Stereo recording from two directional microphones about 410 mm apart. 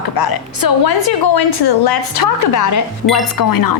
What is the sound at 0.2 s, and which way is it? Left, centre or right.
A woman's voice, left.